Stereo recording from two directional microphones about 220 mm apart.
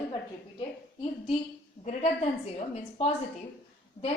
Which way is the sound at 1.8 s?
30° left (ahead or behind).